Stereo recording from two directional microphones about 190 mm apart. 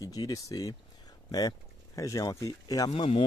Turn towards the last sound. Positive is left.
turn(degrees=30)  # may be behind; listen again after turning